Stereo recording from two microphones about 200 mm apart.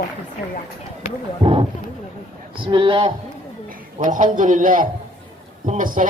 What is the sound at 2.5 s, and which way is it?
Speech, 25° right (ahead or behind).